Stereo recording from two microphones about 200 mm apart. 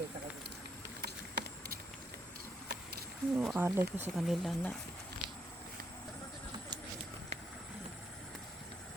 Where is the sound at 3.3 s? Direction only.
5° right (ahead or behind).